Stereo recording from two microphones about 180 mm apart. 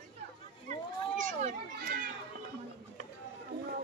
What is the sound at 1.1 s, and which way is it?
Children playing, 45° right (ahead or behind).